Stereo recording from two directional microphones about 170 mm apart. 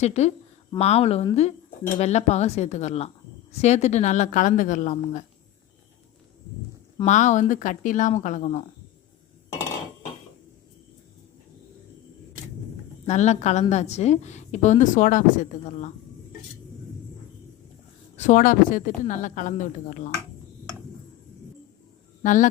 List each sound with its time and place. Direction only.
0.0 s a woman's voice: 40° left (ahead or behind)
7.0 s a woman's voice: 45° left (ahead or behind)
13.1 s a woman's voice: 40° left (ahead or behind)
18.2 s a woman's voice: 50° left (ahead or behind)
22.2 s speech: 50° left (ahead or behind)